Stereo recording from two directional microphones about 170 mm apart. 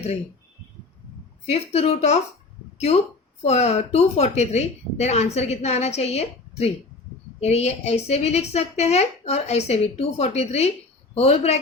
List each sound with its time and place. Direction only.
1.5 s a woman's voice: 35° left (ahead or behind)